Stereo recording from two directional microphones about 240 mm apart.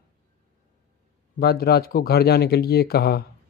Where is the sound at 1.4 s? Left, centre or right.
Left.